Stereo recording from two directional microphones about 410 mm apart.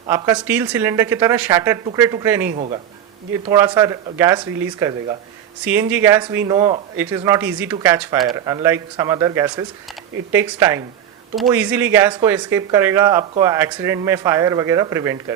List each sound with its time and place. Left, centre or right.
0.1 s speech: centre